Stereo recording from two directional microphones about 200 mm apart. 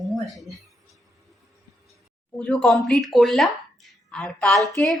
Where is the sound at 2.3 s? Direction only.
5° left (ahead or behind).